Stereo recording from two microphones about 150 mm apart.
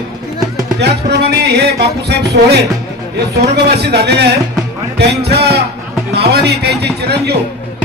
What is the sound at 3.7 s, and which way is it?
Speech, 90° right.